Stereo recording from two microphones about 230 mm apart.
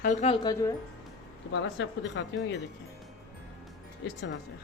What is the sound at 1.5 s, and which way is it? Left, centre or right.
Speech, left.